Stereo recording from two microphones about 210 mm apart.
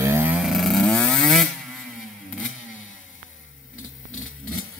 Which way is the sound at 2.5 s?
70° left (ahead or behind).